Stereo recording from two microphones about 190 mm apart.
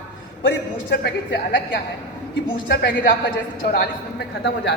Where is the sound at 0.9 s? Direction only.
65° left (ahead or behind).